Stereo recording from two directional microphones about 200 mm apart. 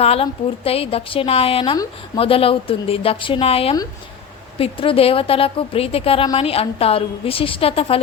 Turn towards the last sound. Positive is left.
turn(degrees=30)  # may be behind; listen again after turning